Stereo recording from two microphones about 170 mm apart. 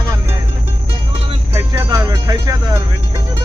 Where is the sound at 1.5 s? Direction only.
20° right (ahead or behind).